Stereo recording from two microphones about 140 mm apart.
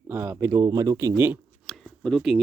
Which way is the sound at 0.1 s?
20° right (ahead or behind).